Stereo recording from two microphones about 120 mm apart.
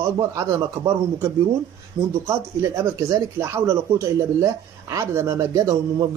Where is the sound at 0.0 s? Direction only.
25° right (ahead or behind).